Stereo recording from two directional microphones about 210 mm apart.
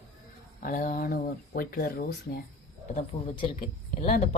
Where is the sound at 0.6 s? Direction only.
40° left (ahead or behind).